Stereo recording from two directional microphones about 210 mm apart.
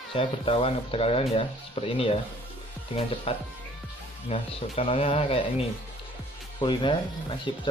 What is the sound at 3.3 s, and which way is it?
Speech, 25° left (ahead or behind).